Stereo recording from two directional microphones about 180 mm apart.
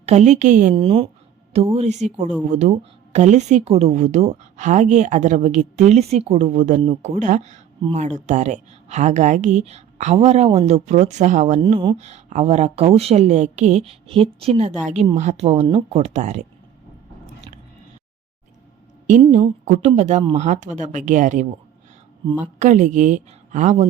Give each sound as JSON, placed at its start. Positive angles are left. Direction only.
{"t": 0.0, "sound": "speech", "side_deg": -40}
{"t": 0.7, "sound": "speech", "side_deg": -30}
{"t": 11.6, "sound": "speech", "side_deg": -30}
{"t": 19.3, "sound": "speech", "side_deg": -40}
{"t": 22.5, "sound": "speech", "side_deg": -45}